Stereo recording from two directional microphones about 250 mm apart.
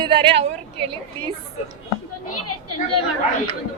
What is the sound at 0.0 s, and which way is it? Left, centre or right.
Speech, centre.